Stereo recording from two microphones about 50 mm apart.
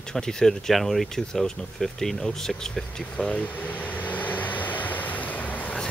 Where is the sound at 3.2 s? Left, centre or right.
Left.